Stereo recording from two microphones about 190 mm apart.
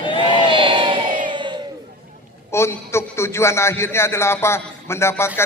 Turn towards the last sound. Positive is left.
turn(degrees=15)  # may be behind; listen again after turning